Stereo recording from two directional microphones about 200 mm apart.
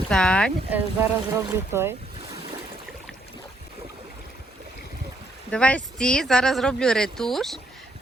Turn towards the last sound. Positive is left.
turn(degrees=0)  # may be behind; listen again after turning